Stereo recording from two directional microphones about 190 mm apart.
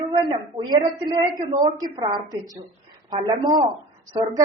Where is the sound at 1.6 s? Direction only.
20° right (ahead or behind).